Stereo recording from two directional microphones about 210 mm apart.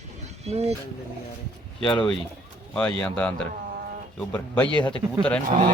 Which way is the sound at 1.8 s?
20° left (ahead or behind).